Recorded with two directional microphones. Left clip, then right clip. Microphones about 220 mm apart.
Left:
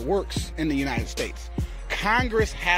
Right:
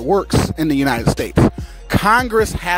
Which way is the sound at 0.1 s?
50° right (ahead or behind).